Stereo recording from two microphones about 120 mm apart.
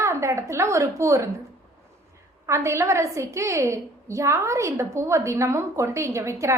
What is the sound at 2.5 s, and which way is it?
A woman's voice, 25° right (ahead or behind).